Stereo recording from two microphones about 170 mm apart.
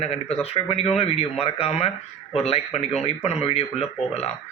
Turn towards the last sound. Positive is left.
turn(degrees=40)  # may be behind; listen again after turning